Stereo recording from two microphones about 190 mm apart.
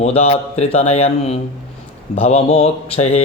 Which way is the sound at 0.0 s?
35° left (ahead or behind).